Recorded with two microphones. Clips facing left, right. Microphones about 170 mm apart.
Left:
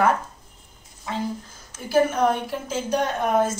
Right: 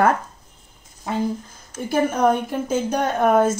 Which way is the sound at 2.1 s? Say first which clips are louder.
Right 3 dB; 50° right (ahead or behind).